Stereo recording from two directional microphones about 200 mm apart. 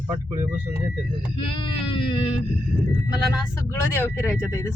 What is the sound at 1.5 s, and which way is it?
Speech, 25° left (ahead or behind).